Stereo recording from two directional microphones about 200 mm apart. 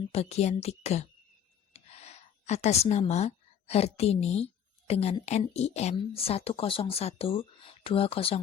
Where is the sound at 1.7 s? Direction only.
30° left (ahead or behind).